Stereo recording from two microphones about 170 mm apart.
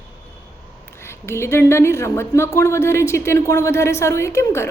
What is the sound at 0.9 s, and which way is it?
A woman's voice, 15° left (ahead or behind).